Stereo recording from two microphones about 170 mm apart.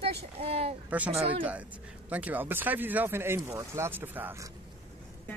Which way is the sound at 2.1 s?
10° right (ahead or behind).